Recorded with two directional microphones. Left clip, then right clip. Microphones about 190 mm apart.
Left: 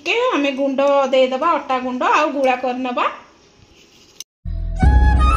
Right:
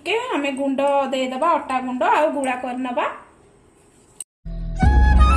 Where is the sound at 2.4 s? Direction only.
35° left (ahead or behind).